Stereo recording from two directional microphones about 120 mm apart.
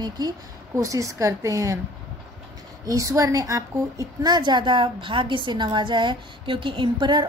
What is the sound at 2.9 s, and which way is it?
A woman's voice, 30° right (ahead or behind).